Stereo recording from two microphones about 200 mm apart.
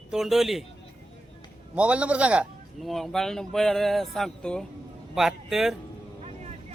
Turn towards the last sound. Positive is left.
turn(degrees=0)  # may be behind; listen again after turning